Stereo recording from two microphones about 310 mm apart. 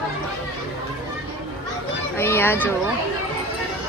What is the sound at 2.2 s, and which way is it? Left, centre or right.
Speech, centre.